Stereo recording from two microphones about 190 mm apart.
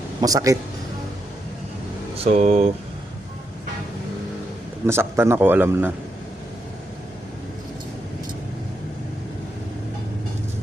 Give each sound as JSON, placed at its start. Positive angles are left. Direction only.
{"t": 0.2, "sound": "a man's voice", "side_deg": -20}
{"t": 2.1, "sound": "speech", "side_deg": -35}
{"t": 4.9, "sound": "a man's voice", "side_deg": -15}